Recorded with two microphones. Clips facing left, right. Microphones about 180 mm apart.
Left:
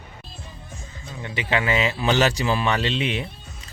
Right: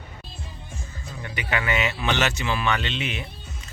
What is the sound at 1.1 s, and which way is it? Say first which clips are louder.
Speech: left 4 dB; 25° left (ahead or behind).